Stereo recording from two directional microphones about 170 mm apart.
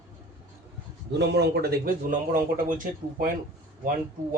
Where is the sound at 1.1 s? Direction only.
85° right; by 2.9 s 55° right (ahead or behind).